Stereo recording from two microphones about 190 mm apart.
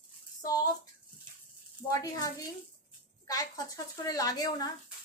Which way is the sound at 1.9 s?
15° left (ahead or behind).